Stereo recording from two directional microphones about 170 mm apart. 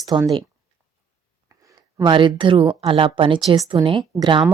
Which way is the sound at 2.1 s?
30° right (ahead or behind).